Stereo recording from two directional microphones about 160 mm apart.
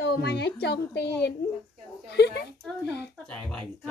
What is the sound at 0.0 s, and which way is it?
Speech, 90° left.